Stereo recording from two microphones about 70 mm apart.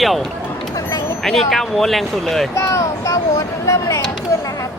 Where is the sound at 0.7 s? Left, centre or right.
Left.